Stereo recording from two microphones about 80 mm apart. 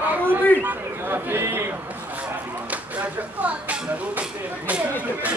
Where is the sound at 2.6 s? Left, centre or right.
Centre.